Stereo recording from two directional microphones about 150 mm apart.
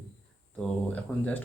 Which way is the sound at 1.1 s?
15° left (ahead or behind).